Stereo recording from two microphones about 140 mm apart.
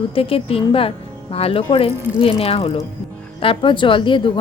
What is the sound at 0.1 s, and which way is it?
A woman's voice, 40° left (ahead or behind).